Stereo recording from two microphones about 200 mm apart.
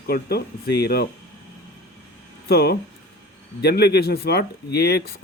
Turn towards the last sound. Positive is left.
turn(degrees=55)  # may be behind; listen again after turning